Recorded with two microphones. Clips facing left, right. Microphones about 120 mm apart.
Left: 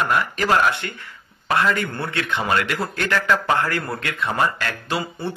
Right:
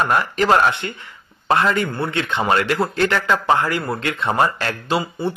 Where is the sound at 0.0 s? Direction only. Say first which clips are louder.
Right 3 dB; 30° right (ahead or behind); by 3.9 s 15° right (ahead or behind).